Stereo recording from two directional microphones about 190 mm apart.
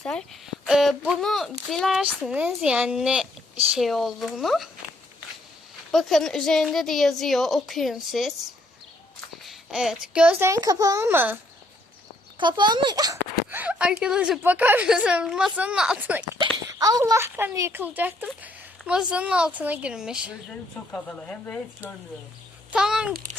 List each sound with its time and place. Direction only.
0.0 s a child's voice: 5° left (ahead or behind)
5.9 s a child's voice: centre (ahead or behind)
9.4 s a woman's voice: centre (ahead or behind)
12.4 s a sound: 25° right (ahead or behind)
13.6 s a child's voice: 5° right (ahead or behind)
16.6 s a child's voice: 20° right (ahead or behind); by 21.6 s 5° left (ahead or behind)
22.7 s a sound: 5° right (ahead or behind)